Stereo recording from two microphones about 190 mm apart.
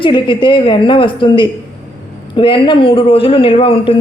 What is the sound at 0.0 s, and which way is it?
Speech, 25° left (ahead or behind).